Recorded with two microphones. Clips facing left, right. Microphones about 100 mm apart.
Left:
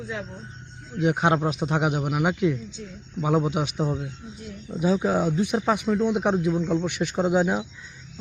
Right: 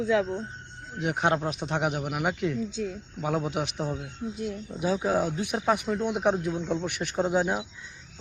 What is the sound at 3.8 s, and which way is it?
Speech, 30° left (ahead or behind).